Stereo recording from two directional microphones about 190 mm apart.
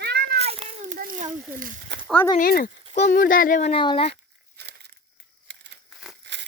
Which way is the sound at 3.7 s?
25° left (ahead or behind).